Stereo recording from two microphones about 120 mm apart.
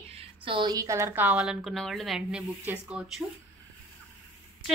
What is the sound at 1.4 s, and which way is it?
A woman's voice, centre (ahead or behind).